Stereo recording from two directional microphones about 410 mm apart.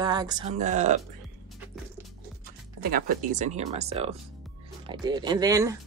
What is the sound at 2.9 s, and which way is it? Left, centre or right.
Speech, centre.